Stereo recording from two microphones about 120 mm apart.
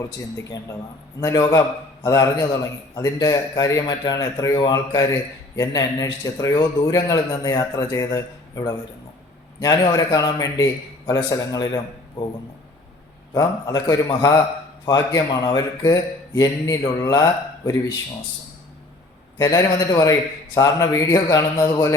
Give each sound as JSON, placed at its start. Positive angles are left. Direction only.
{"t": 1.2, "sound": "a man's voice", "side_deg": 30}
{"t": 13.3, "sound": "a man's voice", "side_deg": 30}
{"t": 19.4, "sound": "a man's voice", "side_deg": 30}